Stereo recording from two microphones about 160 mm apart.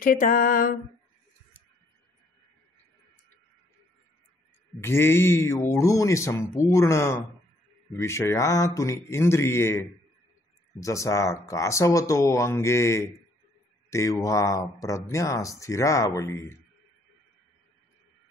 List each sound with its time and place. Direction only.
0.0 s female singing: 60° left (ahead or behind)
4.7 s speech: 15° left (ahead or behind)